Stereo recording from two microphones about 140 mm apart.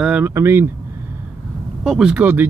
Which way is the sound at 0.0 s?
10° right (ahead or behind).